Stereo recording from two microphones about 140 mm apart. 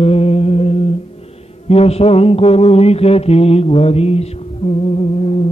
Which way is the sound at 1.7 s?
45° left (ahead or behind).